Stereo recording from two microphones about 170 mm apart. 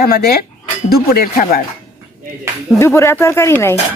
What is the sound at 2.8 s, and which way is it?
Speech, 15° left (ahead or behind).